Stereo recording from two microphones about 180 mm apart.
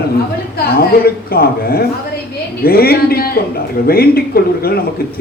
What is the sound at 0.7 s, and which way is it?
A man's voice, 55° left (ahead or behind).